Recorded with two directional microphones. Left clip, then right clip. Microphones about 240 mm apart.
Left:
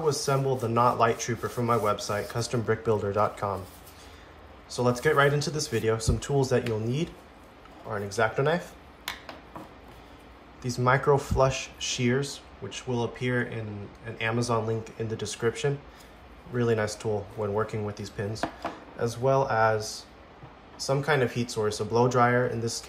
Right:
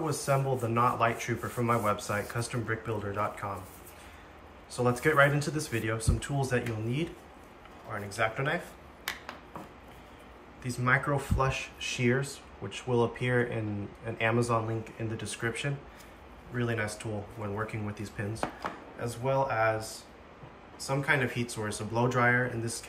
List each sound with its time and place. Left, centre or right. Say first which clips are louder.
0.1 s speech: left 3 dB; centre
4.6 s speech: left 3 dB; centre
8.2 s speech: left 5 dB; centre
10.6 s speech: left 3 dB; centre
19.0 s speech: left 5 dB; centre